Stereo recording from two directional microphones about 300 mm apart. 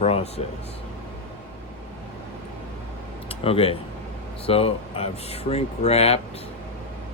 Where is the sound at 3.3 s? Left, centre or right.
Centre.